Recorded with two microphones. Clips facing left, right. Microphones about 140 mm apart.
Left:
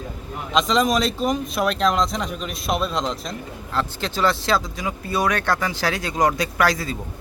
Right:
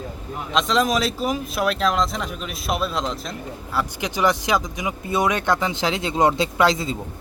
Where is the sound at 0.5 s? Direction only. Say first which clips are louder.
Left 1 dB; centre (ahead or behind).